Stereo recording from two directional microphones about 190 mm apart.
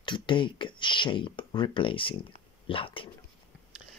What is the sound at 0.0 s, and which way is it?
Speech, 25° left (ahead or behind).